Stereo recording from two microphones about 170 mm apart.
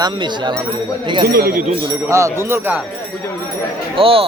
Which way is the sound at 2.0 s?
15° right (ahead or behind).